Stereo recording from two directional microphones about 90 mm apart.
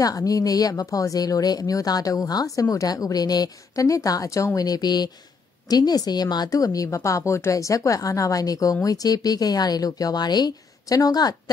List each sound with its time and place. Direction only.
0.0 s speech: 40° left (ahead or behind)